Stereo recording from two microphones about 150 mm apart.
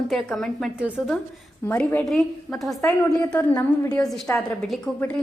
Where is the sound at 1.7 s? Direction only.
10° left (ahead or behind).